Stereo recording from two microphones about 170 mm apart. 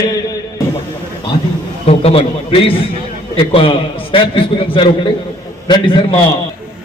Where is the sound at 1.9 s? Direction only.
35° left (ahead or behind).